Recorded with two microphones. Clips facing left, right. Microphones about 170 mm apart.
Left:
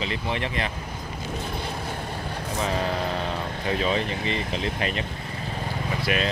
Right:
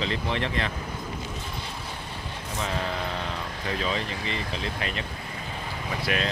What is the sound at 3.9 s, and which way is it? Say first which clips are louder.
Speech: left 4 dB; 25° left (ahead or behind).